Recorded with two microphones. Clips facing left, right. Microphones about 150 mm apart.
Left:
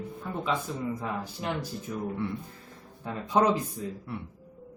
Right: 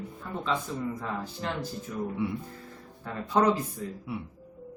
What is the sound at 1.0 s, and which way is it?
Speech, 15° left (ahead or behind).